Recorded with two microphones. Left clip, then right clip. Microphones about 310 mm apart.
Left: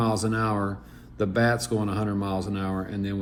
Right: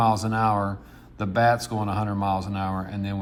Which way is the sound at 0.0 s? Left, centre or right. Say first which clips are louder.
Right 4 dB; centre.